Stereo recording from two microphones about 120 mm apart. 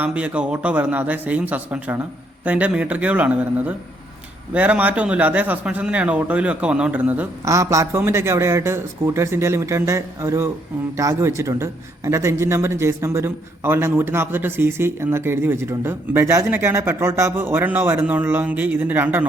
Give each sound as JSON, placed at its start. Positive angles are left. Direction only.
{"t": 0.0, "sound": "a man's voice", "side_deg": -10}
{"t": 7.4, "sound": "a man's voice", "side_deg": -25}